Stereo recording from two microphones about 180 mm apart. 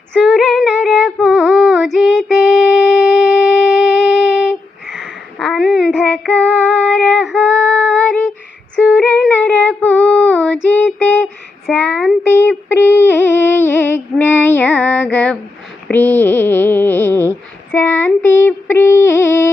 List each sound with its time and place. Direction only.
0.3 s female singing: centre (ahead or behind)
4.4 s a sound: centre (ahead or behind)
6.3 s female singing: 5° left (ahead or behind)
8.8 s female singing: 5° right (ahead or behind)
9.4 s child singing: 10° left (ahead or behind)
12.4 s a sound: 10° left (ahead or behind)